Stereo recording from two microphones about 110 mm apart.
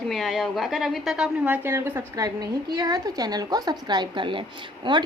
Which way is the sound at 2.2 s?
35° right (ahead or behind).